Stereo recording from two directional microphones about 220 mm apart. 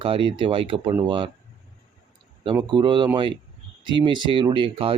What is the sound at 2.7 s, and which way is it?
Speech, 20° right (ahead or behind).